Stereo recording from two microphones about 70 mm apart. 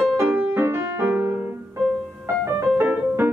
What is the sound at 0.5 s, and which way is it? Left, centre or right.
Music, right.